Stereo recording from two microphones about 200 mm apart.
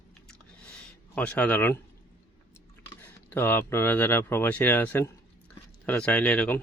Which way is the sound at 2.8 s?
10° left (ahead or behind).